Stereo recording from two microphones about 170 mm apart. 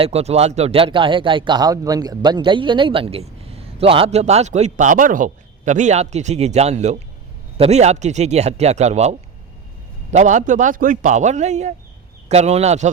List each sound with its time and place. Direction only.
0.0 s a man's voice: 40° right (ahead or behind)